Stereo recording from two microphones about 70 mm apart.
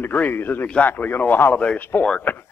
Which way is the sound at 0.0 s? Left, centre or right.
Left.